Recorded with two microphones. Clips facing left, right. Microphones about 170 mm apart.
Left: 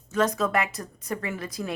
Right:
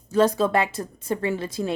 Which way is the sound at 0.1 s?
30° right (ahead or behind).